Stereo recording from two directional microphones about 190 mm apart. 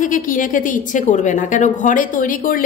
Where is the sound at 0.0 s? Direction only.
45° left (ahead or behind).